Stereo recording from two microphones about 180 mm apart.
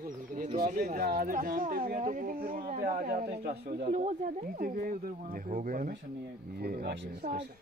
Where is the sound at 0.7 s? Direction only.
55° right (ahead or behind).